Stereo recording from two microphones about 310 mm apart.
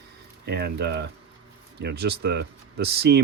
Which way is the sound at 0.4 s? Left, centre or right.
Right.